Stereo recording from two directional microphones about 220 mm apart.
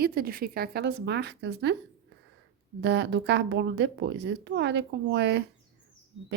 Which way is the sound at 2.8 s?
50° right (ahead or behind).